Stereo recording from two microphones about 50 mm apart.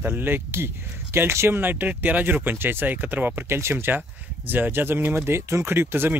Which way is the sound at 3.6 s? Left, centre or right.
Right.